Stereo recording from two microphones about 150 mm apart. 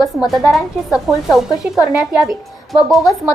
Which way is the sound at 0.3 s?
Centre (ahead or behind).